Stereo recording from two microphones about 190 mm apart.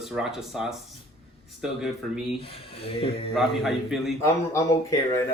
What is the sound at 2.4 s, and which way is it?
Speech, 30° left (ahead or behind).